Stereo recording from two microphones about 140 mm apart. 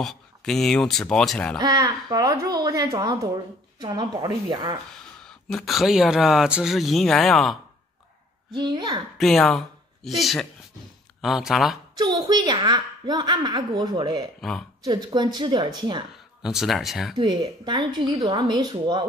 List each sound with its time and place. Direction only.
0.0 s speech: 5° left (ahead or behind)
1.6 s a woman's voice: 30° right (ahead or behind)
5.5 s speech: centre (ahead or behind)
8.5 s a woman's voice: 30° right (ahead or behind)
9.2 s speech: centre (ahead or behind)
12.0 s a woman's voice: 30° right (ahead or behind)
16.4 s speech: centre (ahead or behind)
17.2 s a woman's voice: 30° right (ahead or behind)